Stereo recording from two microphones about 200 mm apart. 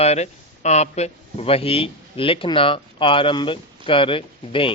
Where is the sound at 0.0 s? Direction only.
30° left (ahead or behind).